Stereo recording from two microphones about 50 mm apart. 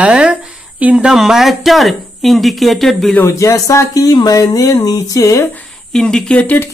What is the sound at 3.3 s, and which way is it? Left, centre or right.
Speech, left.